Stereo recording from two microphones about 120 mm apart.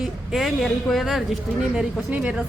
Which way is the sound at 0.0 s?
5° right (ahead or behind).